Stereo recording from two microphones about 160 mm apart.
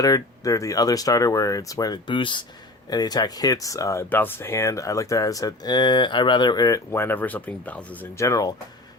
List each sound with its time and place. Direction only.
0.0 s speech: 20° left (ahead or behind)